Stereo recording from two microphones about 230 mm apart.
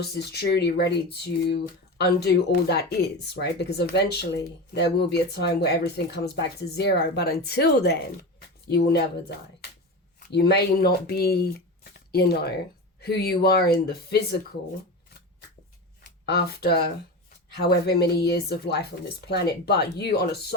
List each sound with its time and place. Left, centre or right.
0.0 s speech: left
10.2 s speech: left
16.2 s speech: left